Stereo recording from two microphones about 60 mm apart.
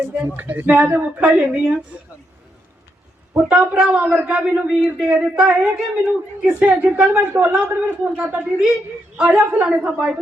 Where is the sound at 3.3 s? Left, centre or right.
Centre.